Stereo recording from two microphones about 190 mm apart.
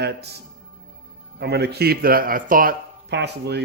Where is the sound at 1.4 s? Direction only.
60° right (ahead or behind).